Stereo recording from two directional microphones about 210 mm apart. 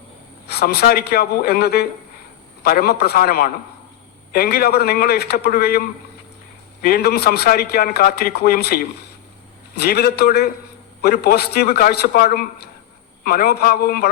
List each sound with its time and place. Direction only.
0.4 s a man's voice: 50° left (ahead or behind)
6.8 s a man's voice: 50° left (ahead or behind)